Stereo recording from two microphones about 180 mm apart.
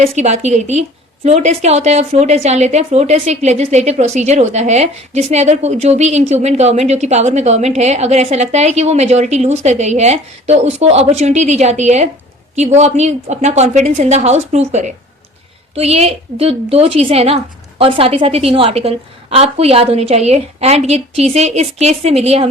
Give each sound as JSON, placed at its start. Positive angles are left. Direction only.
{"t": 0.0, "sound": "a woman's voice", "side_deg": -40}